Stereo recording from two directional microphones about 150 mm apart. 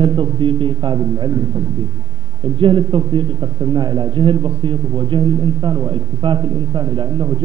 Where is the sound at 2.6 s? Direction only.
30° right (ahead or behind).